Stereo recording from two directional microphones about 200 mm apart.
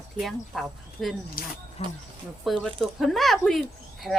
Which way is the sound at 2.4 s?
Centre (ahead or behind).